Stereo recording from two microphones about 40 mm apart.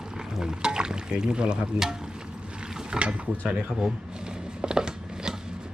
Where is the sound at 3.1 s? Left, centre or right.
Centre.